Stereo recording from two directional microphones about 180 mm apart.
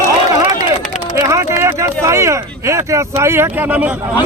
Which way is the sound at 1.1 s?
15° right (ahead or behind).